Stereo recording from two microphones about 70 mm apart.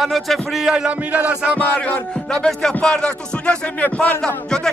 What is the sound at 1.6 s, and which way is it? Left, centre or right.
Music, left.